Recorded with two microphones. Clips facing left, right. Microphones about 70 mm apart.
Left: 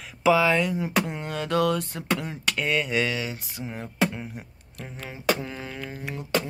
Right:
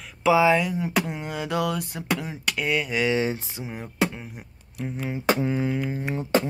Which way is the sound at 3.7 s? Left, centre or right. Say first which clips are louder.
Even; centre.